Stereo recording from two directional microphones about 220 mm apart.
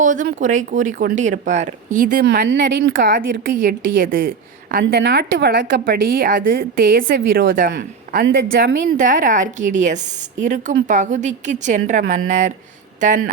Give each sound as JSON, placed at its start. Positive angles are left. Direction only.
{"t": 0.0, "sound": "a woman's voice", "side_deg": -35}
{"t": 2.5, "sound": "speech", "side_deg": -55}
{"t": 3.1, "sound": "a woman's voice", "side_deg": -40}